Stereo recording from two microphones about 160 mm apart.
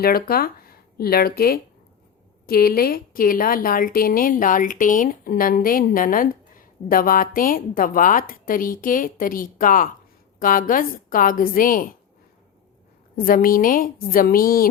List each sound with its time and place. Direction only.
0.0 s a woman's voice: 70° left (ahead or behind)
13.1 s a woman's voice: 60° left (ahead or behind)